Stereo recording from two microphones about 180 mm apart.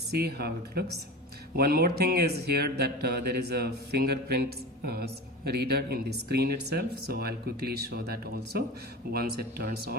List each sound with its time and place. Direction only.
0.1 s speech: 60° right (ahead or behind)